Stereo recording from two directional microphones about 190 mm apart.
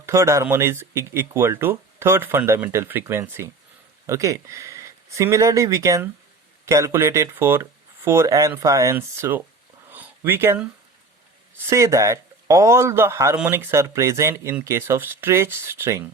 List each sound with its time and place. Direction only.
0.0 s a man's voice: 15° right (ahead or behind)
9.9 s a sound: 10° right (ahead or behind)
11.6 s a man's voice: 15° right (ahead or behind)